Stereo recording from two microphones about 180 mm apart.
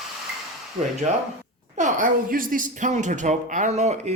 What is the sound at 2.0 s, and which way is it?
Speech, 50° right (ahead or behind).